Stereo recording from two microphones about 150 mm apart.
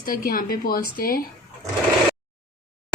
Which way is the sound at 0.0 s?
75° left (ahead or behind).